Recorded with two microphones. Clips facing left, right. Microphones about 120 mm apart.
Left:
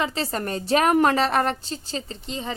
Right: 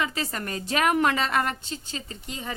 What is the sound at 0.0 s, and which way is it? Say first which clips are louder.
A woman's voice: left 4 dB; 30° left (ahead or behind).